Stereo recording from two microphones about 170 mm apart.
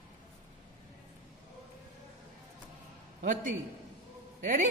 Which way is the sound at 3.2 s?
50° right (ahead or behind).